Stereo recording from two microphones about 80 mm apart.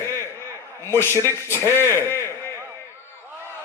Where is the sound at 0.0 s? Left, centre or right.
Left.